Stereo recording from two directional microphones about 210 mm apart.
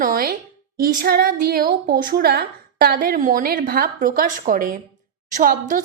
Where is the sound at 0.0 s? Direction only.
45° right (ahead or behind).